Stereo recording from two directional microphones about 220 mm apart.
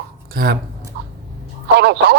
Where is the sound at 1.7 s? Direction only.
50° right (ahead or behind).